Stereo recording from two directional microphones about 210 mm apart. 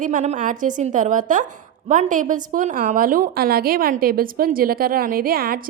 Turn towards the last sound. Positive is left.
turn(degrees=-45)  # may be behind; listen again after turning